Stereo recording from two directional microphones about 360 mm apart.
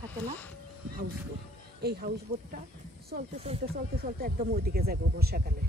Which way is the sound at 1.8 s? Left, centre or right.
Right.